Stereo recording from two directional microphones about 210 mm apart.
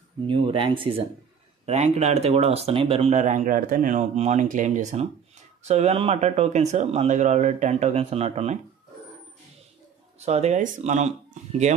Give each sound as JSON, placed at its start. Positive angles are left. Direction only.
{"t": 0.3, "sound": "speech", "side_deg": -25}
{"t": 10.1, "sound": "speech", "side_deg": -30}